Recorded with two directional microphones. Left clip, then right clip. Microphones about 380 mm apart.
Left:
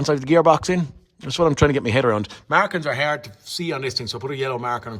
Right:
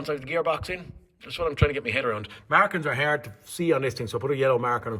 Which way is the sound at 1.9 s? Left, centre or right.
Centre.